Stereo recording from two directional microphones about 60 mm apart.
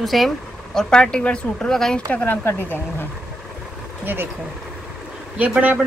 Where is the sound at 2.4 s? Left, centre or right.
Left.